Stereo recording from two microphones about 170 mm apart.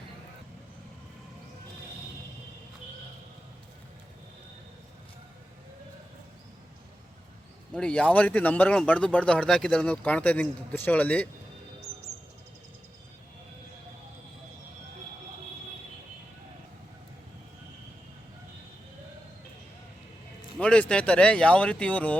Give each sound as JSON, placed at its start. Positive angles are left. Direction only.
{"t": 7.7, "sound": "speech", "side_deg": 5}
{"t": 20.6, "sound": "speech", "side_deg": 5}